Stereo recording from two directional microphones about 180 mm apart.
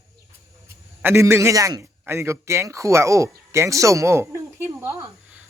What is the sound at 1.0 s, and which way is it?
A man's voice, 15° right (ahead or behind).